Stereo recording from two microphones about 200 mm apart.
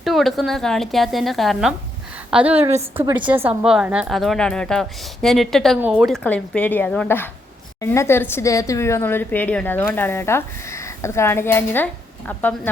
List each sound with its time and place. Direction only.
0.0 s a woman's voice: centre (ahead or behind)
2.6 s a woman's voice: 35° right (ahead or behind)
2.9 s a woman's voice: 15° right (ahead or behind)
6.2 s speech: 5° left (ahead or behind)